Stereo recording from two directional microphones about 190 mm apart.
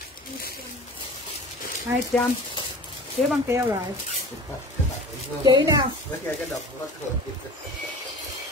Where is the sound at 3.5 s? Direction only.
10° right (ahead or behind).